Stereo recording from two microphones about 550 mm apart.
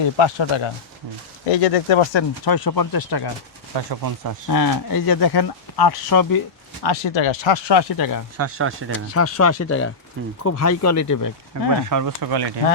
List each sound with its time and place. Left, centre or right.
0.2 s speech: left
1.5 s speech: left
2.4 s speech: left
4.0 s speech: right
4.4 s speech: left
6.8 s speech: left
8.4 s speech: right
8.9 s speech: left
11.9 s speech: right